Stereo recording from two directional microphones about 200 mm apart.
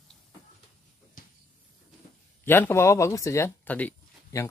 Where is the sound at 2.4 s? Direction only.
10° left (ahead or behind).